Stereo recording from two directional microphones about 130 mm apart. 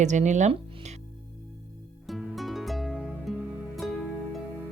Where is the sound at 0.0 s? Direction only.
65° right (ahead or behind).